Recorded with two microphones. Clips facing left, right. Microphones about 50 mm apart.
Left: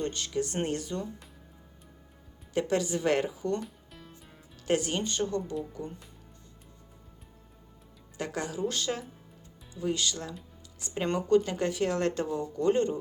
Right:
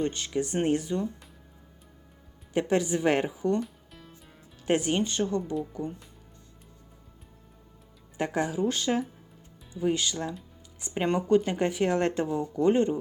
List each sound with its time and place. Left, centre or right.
0.0 s speech: centre
2.5 s speech: centre
3.6 s music: centre
4.6 s speech: centre
8.2 s speech: centre